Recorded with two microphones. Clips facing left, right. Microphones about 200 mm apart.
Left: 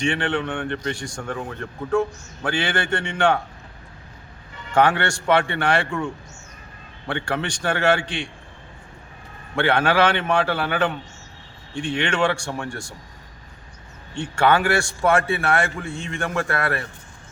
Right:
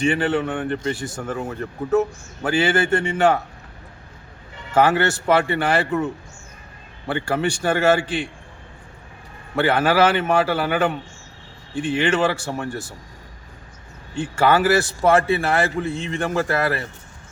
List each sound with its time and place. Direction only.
0.0 s a man's voice: 5° right (ahead or behind)
4.7 s a man's voice: 5° right (ahead or behind)
7.1 s a man's voice: 5° right (ahead or behind)
9.6 s a man's voice: 5° right (ahead or behind)
14.2 s a man's voice: 5° right (ahead or behind)
15.1 s a man's voice: 35° right (ahead or behind)
15.8 s a man's voice: centre (ahead or behind)